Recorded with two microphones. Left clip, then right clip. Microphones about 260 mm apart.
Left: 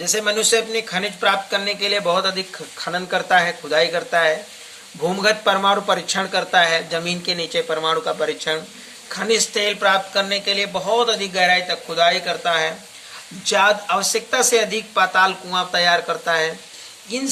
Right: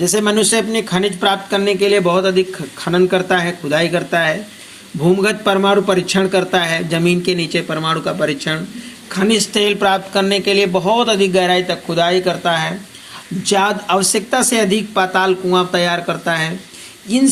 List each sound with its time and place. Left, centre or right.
0.0 s speech: centre